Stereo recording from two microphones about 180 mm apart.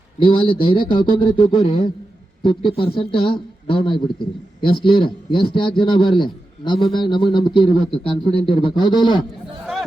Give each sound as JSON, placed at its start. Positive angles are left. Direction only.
{"t": 0.2, "sound": "a man's voice", "side_deg": 30}